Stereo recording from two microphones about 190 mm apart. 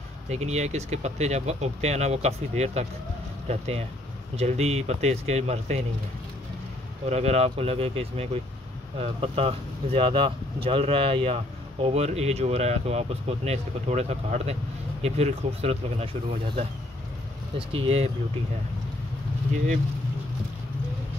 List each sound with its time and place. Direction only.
0.3 s speech: 35° right (ahead or behind)
7.1 s speech: 35° right (ahead or behind)
17.6 s speech: 30° right (ahead or behind)